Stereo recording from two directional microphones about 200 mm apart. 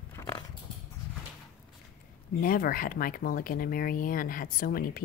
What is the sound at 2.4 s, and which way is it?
A woman's voice, 45° left (ahead or behind).